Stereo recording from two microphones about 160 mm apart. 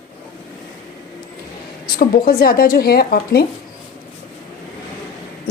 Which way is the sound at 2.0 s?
70° left (ahead or behind).